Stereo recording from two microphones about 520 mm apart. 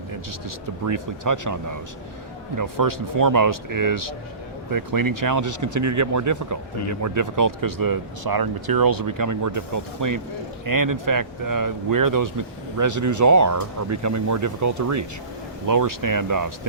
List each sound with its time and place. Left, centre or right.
0.9 s speech: right